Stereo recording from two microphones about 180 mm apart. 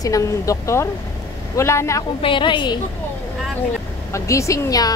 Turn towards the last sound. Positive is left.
turn(degrees=20)  # may be behind; listen again after turning